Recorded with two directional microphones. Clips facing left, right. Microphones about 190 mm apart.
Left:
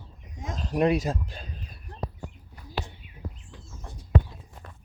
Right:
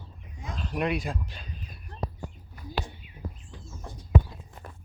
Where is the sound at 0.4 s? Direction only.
40° left (ahead or behind).